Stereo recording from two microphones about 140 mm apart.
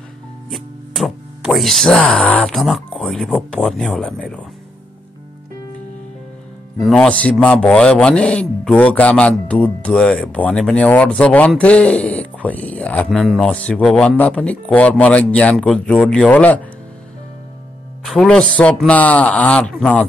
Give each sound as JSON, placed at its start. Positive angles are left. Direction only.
{"t": 0.5, "sound": "speech", "side_deg": 0}
{"t": 6.8, "sound": "speech", "side_deg": 5}
{"t": 18.0, "sound": "speech", "side_deg": 0}